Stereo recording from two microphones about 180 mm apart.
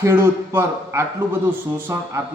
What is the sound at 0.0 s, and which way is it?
A man's voice, 15° right (ahead or behind).